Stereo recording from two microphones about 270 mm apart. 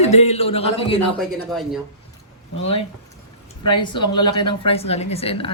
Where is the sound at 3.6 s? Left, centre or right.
Centre.